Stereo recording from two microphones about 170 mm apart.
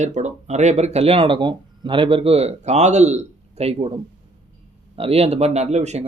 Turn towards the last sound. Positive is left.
turn(degrees=-40)  # may be behind; listen again after turning